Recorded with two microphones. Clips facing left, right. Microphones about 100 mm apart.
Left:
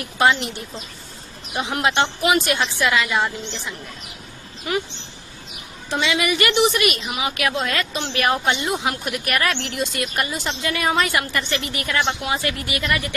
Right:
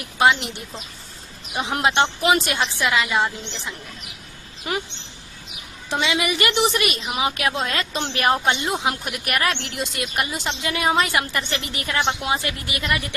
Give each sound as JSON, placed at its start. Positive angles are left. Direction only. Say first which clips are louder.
{"t": 1.7, "sound": "a woman's voice", "louder": "right 1 dB", "side_deg": -25}
{"t": 5.9, "sound": "a woman's voice", "louder": "left 1 dB", "side_deg": -25}